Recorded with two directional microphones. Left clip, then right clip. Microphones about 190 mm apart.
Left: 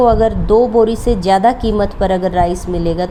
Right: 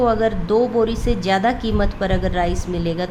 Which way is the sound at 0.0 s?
15° left (ahead or behind).